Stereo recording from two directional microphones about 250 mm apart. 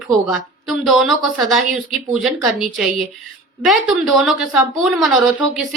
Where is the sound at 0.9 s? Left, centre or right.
Centre.